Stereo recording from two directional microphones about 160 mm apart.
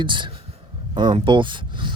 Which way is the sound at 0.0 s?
30° right (ahead or behind).